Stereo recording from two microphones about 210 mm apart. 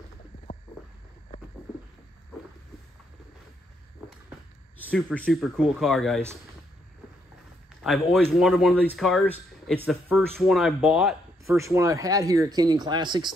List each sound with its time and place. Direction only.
4.9 s speech: 5° left (ahead or behind)
7.8 s speech: centre (ahead or behind)
11.4 s speech: 15° right (ahead or behind)